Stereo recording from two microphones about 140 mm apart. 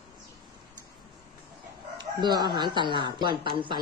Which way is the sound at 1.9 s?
30° right (ahead or behind).